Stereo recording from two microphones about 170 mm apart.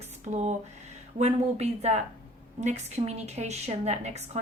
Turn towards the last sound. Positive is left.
turn(degrees=-40)  # may be behind; listen again after turning